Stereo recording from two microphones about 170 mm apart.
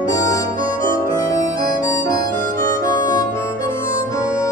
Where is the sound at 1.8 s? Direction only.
20° left (ahead or behind).